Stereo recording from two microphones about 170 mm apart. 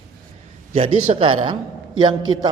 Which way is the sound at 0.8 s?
35° right (ahead or behind).